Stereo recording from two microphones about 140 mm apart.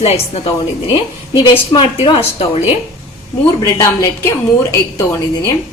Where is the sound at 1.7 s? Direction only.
35° left (ahead or behind).